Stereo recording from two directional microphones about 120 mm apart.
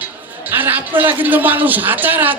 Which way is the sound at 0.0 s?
15° right (ahead or behind).